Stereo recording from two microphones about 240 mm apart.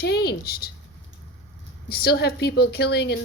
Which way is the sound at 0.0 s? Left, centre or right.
Left.